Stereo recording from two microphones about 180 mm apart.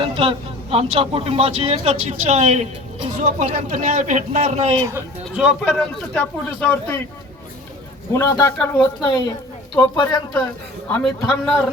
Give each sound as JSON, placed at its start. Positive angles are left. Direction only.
{"t": 0.0, "sound": "speech", "side_deg": -30}
{"t": 5.3, "sound": "speech", "side_deg": -5}
{"t": 8.1, "sound": "speech", "side_deg": 15}